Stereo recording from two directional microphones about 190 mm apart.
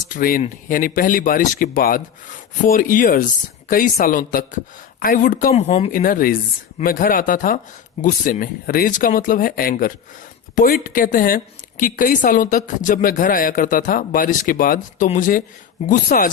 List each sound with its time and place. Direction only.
0.1 s a woman's voice: 50° left (ahead or behind); by 5.9 s 35° left (ahead or behind)
5.9 s a woman's voice: 50° left (ahead or behind)